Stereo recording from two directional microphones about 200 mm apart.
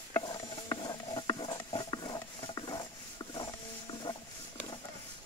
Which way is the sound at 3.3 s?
25° left (ahead or behind).